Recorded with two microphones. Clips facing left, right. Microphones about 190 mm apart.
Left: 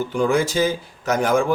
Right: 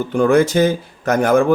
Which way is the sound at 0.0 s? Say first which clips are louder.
Right 6 dB; 60° right (ahead or behind).